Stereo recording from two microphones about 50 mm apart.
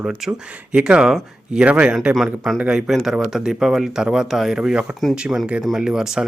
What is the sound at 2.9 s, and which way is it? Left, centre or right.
Speech, centre.